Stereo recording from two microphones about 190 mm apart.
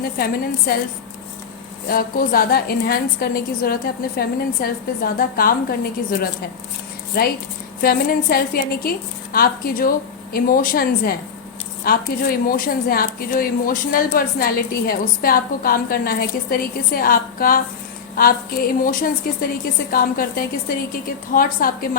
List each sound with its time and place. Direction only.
0.7 s a woman's voice: 55° left (ahead or behind)
1.9 s a woman's voice: 50° left (ahead or behind)
7.1 s a woman's voice: 50° left (ahead or behind)